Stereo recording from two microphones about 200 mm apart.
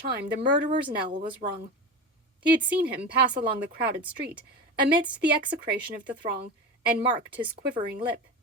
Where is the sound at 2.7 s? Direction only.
55° right (ahead or behind).